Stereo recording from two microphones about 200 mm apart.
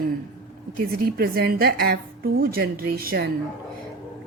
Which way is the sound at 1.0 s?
45° right (ahead or behind).